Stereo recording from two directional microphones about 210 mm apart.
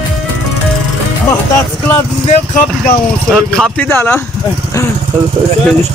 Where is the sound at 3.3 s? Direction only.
5° left (ahead or behind).